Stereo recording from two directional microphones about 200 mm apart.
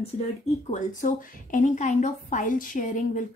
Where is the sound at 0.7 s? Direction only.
40° left (ahead or behind).